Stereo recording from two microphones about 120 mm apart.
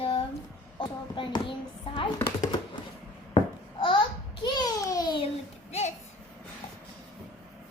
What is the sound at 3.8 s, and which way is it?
Babbling, 40° left (ahead or behind).